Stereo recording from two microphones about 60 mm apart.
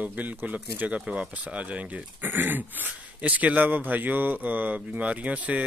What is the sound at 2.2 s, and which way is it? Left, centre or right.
A man's voice, right.